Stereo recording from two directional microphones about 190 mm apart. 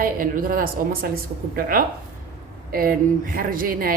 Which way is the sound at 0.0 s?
50° right (ahead or behind).